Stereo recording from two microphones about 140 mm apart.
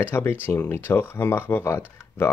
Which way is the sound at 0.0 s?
15° left (ahead or behind).